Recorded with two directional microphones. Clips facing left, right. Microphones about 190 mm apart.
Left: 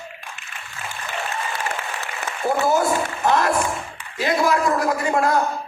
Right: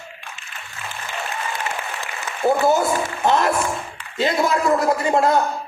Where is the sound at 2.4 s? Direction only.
25° right (ahead or behind).